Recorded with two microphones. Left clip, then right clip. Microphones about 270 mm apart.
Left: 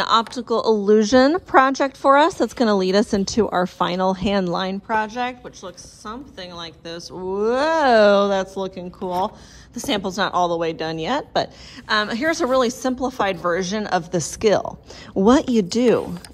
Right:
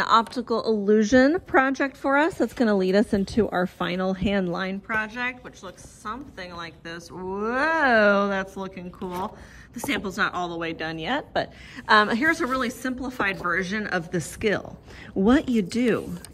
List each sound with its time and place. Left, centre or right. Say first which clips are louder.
0.0 s a woman's voice: left 2 dB; centre
3.1 s speech: left 4 dB; right
3.8 s a woman's voice: left 6 dB; centre
11.9 s a woman's voice: right 1 dB; centre
15.2 s speech: left 6 dB; right
15.5 s a woman's voice: left 7 dB; centre